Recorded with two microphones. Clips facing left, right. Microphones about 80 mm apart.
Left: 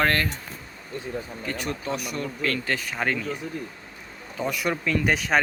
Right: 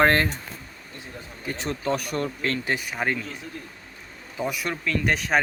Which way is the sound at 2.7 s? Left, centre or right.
Centre.